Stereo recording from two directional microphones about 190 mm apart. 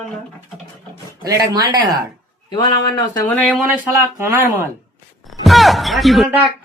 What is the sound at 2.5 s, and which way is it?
Speech, 20° left (ahead or behind).